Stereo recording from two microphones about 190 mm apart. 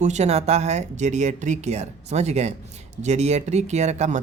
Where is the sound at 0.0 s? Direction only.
35° right (ahead or behind).